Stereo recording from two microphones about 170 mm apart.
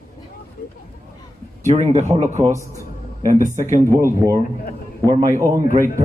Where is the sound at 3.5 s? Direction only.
45° right (ahead or behind).